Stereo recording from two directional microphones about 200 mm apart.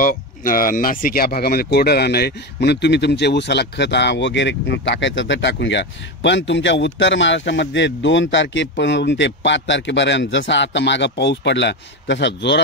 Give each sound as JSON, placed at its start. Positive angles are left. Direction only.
{"t": 0.0, "sound": "speech", "side_deg": 45}